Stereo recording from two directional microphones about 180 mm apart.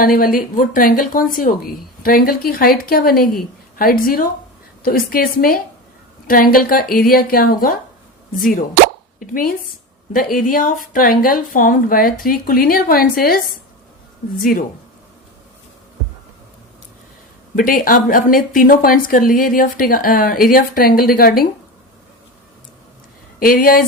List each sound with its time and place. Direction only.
0.0 s speech: 55° left (ahead or behind)
17.5 s speech: 50° left (ahead or behind)
23.4 s speech: 50° left (ahead or behind)